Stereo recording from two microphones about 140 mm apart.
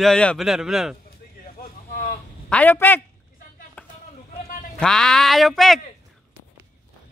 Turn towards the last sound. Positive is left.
turn(degrees=0)  # may be behind; listen again after turning